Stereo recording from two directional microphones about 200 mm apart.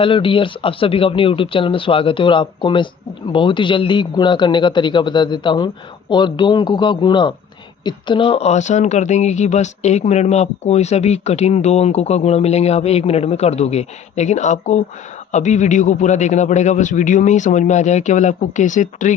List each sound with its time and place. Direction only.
0.0 s a man's voice: 25° left (ahead or behind)